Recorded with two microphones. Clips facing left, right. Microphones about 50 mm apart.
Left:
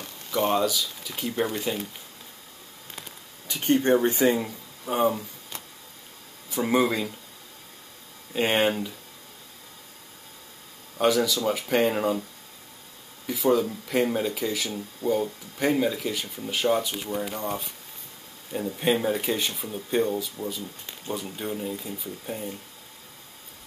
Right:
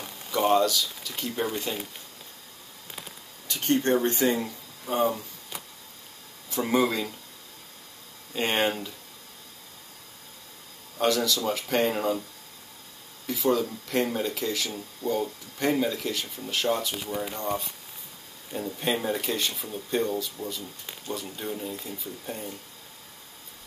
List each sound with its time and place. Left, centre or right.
0.0 s speech: centre
3.4 s speech: centre
6.5 s speech: centre
8.3 s speech: centre
11.0 s speech: centre
13.3 s speech: centre
16.9 s speech: centre
17.3 s speech: centre